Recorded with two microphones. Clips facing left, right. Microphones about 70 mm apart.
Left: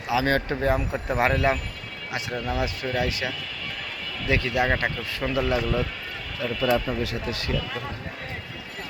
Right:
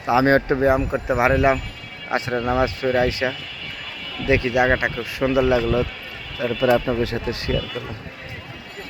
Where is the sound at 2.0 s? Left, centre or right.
Right.